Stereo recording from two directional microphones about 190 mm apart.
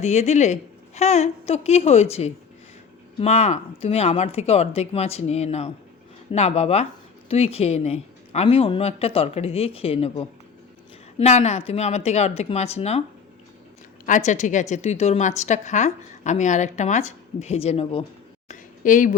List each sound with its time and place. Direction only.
0.0 s a woman's voice: 35° left (ahead or behind)
11.2 s a woman's voice: 35° left (ahead or behind)
14.0 s a woman's voice: 40° left (ahead or behind)
18.4 s a sound: 45° left (ahead or behind)